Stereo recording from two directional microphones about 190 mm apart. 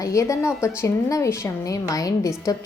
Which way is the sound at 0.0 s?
15° left (ahead or behind).